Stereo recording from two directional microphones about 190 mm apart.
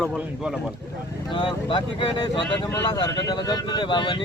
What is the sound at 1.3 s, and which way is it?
Speech, 25° left (ahead or behind).